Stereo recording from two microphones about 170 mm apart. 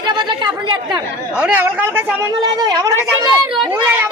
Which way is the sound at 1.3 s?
10° right (ahead or behind).